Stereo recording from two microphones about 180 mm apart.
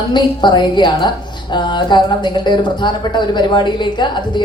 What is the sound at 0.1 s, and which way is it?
A woman's voice, 25° left (ahead or behind).